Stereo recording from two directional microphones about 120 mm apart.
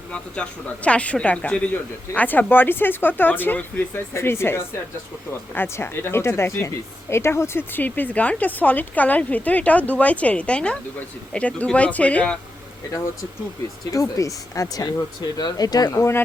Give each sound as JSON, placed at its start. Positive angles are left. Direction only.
{"t": 0.9, "sound": "speech", "side_deg": 10}
{"t": 13.9, "sound": "speech", "side_deg": 30}